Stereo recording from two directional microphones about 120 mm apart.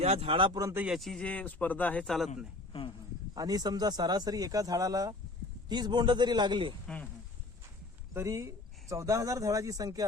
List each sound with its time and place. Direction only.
0.0 s a man's voice: 60° right (ahead or behind); by 0.6 s 45° right (ahead or behind)
0.6 s speech: 20° right (ahead or behind)
0.9 s speech: centre (ahead or behind)
3.3 s speech: 35° right (ahead or behind)
6.8 s speech: 10° left (ahead or behind)
8.1 s speech: 25° right (ahead or behind)